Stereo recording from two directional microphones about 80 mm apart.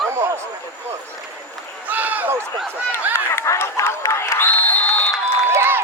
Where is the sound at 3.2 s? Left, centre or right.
Left.